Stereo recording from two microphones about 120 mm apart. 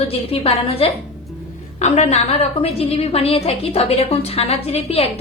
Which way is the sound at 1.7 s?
70° left (ahead or behind).